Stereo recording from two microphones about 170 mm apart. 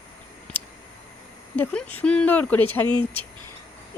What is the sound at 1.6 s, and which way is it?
Speech, 10° left (ahead or behind).